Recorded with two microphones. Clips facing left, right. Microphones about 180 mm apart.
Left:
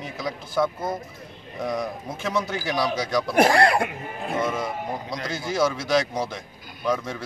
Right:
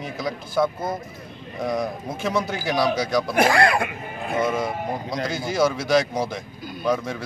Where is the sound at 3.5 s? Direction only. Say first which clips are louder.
Even; 35° left (ahead or behind).